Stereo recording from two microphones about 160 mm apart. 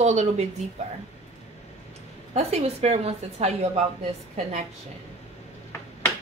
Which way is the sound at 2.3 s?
40° right (ahead or behind).